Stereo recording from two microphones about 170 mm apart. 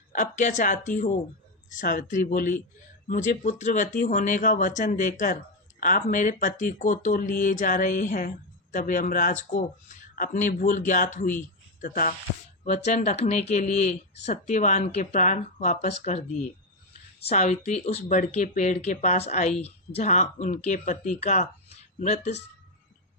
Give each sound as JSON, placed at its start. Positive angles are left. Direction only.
{"t": 0.1, "sound": "speech", "side_deg": 50}